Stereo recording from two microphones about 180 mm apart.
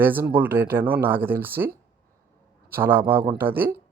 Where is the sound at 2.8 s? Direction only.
10° right (ahead or behind).